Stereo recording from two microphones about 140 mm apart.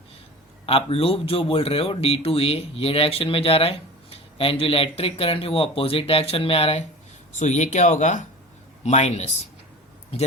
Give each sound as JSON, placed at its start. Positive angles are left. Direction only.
{"t": 0.6, "sound": "a man's voice", "side_deg": 40}
{"t": 7.3, "sound": "a man's voice", "side_deg": 60}